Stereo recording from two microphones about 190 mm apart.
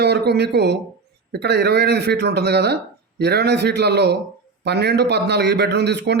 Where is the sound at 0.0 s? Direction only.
60° right (ahead or behind).